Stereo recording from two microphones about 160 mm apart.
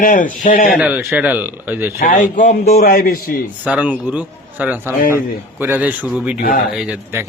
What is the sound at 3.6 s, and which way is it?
A man's voice, 10° right (ahead or behind).